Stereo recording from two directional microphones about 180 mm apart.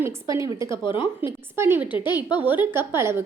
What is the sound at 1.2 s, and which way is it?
A woman's voice, 15° right (ahead or behind).